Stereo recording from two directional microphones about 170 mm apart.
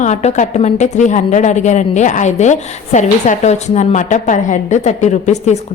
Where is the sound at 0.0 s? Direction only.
40° left (ahead or behind).